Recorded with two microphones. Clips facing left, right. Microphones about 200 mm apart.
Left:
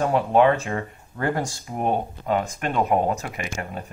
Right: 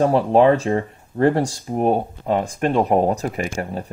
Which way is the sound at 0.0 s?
35° right (ahead or behind).